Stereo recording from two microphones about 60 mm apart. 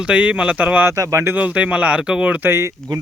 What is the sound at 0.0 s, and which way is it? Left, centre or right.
Speech, centre.